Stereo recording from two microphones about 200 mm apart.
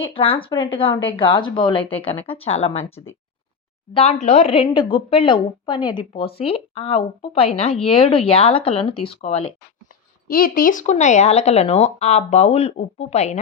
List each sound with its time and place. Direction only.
0.0 s a woman's voice: 30° left (ahead or behind)
10.2 s speech: 45° left (ahead or behind)